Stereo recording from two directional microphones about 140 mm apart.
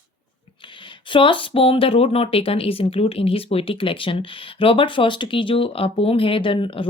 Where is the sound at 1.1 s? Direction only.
35° left (ahead or behind).